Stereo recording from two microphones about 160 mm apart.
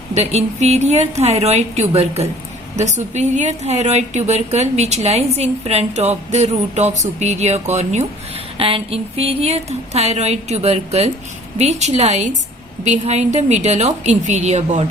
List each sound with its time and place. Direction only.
0.1 s a woman's voice: 45° right (ahead or behind)